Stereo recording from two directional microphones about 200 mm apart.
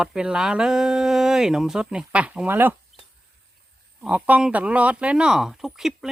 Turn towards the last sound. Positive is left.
turn(degrees=0)  # may be behind; listen again after turning